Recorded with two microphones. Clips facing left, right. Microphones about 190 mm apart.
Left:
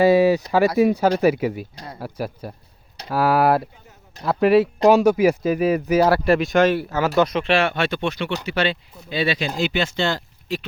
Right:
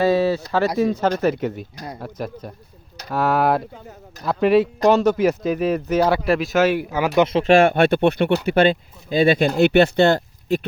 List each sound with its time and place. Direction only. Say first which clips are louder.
0.0 s speech: left 3 dB; 15° left (ahead or behind); by 7.1 s 10° right (ahead or behind)
7.2 s speech: right 2 dB; 25° right (ahead or behind)
7.4 s speech: right 6 dB; 50° right (ahead or behind)
9.6 s speech: right 8 dB; 60° right (ahead or behind)